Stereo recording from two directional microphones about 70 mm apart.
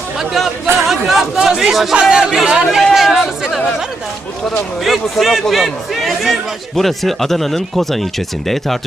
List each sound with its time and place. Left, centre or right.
0.2 s speech: centre
4.8 s speech: centre